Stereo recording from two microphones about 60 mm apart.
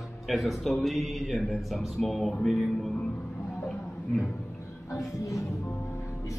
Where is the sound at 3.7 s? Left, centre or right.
Centre.